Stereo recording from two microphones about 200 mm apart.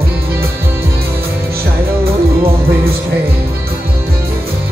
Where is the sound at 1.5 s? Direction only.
50° right (ahead or behind).